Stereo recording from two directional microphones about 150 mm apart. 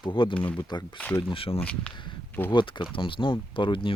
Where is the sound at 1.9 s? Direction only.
30° left (ahead or behind).